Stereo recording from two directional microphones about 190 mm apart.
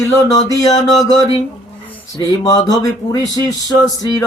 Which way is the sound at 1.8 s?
20° left (ahead or behind).